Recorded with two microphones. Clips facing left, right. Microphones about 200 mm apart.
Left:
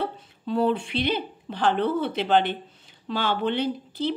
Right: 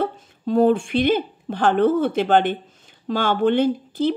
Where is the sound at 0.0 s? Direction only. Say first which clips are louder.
Right 6 dB; 45° right (ahead or behind).